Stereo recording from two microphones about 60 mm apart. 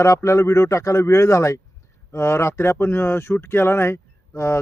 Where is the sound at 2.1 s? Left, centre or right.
Left.